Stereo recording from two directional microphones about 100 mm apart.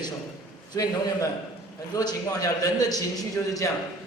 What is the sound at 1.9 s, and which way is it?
A man's voice, 40° left (ahead or behind).